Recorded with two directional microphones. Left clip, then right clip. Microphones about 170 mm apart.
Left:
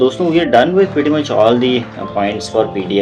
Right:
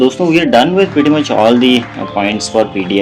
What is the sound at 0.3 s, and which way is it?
Speech, 45° right (ahead or behind).